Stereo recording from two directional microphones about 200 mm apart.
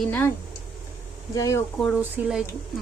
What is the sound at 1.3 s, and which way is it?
Speech, 15° left (ahead or behind).